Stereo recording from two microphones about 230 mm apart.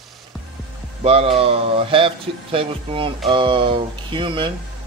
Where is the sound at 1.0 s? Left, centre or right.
Right.